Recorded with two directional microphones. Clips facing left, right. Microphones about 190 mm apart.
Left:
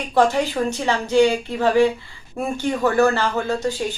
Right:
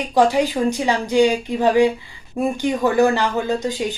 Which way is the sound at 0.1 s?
15° right (ahead or behind).